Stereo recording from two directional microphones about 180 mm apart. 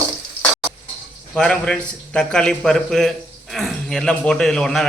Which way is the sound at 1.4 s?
5° left (ahead or behind).